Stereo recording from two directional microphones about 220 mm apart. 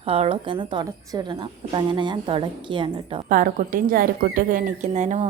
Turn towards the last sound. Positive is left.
turn(degrees=-35)  # may be behind; listen again after turning